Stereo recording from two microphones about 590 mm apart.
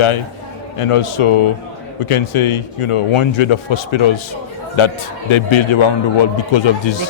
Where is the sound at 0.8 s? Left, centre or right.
Left.